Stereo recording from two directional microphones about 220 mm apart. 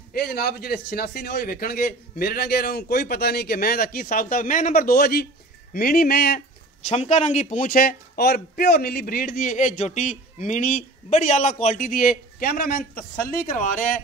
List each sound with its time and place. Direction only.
0.1 s a man's voice: 45° left (ahead or behind)
6.9 s speech: 30° left (ahead or behind)